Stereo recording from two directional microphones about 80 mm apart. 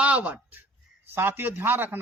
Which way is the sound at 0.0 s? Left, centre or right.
Centre.